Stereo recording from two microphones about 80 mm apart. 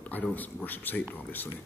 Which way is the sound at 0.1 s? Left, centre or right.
Left.